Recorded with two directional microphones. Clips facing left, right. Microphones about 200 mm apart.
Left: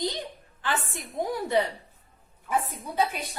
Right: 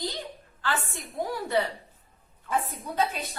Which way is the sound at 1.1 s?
20° left (ahead or behind).